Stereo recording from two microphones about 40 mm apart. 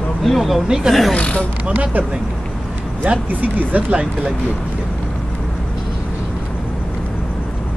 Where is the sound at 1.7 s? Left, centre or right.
Right.